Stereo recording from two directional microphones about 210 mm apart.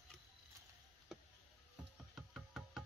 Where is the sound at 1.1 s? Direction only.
Centre (ahead or behind).